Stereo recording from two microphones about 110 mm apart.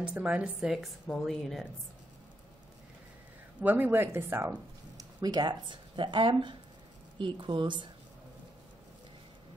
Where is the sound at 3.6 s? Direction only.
15° right (ahead or behind).